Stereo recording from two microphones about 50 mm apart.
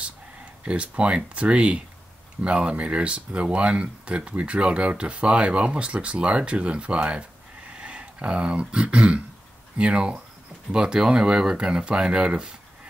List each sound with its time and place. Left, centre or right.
0.7 s speech: right